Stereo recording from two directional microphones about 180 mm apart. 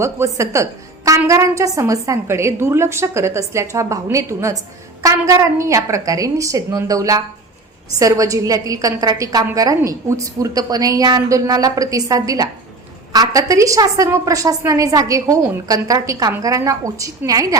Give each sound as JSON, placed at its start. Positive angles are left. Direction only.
{"t": 0.0, "sound": "a woman's voice", "side_deg": -15}